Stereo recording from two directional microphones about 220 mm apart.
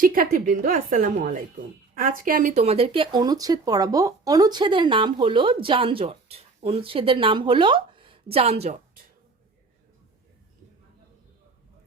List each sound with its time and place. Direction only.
0.0 s a woman's voice: 40° right (ahead or behind)